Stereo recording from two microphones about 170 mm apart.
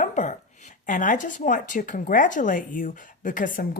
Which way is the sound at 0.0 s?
45° left (ahead or behind).